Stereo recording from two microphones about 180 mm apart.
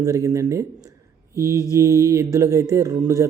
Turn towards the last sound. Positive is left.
turn(degrees=-15)  # may be behind; listen again after turning